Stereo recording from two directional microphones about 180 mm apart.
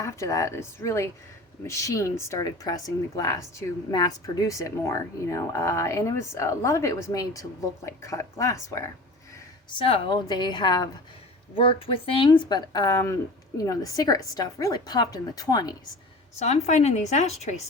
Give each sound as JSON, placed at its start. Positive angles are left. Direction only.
{"t": 0.0, "sound": "speech", "side_deg": 15}
{"t": 9.6, "sound": "a woman's voice", "side_deg": 30}
{"t": 16.4, "sound": "speech", "side_deg": 40}